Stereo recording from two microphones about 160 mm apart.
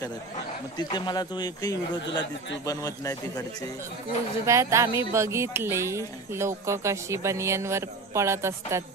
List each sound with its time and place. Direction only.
0.7 s speech: 25° left (ahead or behind)
4.5 s speech: 20° right (ahead or behind)